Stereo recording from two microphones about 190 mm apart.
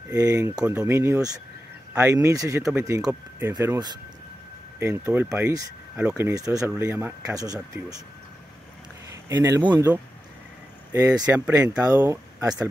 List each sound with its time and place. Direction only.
0.1 s speech: 20° right (ahead or behind)
0.6 s speech: 5° right (ahead or behind)
6.8 s speech: 5° right (ahead or behind)
7.3 s speech: 20° right (ahead or behind)
9.3 s speech: 15° right (ahead or behind)